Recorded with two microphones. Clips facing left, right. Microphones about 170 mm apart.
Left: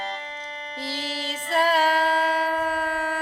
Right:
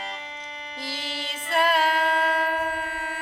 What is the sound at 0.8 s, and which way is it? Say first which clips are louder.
Music: left 3 dB; 30° left (ahead or behind).